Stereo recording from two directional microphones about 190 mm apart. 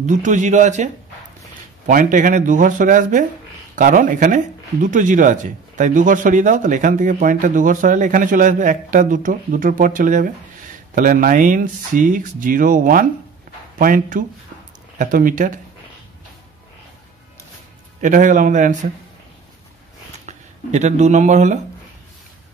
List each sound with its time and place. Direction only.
0.0 s speech: 40° right (ahead or behind)
1.9 s speech: 45° right (ahead or behind)
18.0 s speech: 40° right (ahead or behind)
20.2 s speech: 40° right (ahead or behind)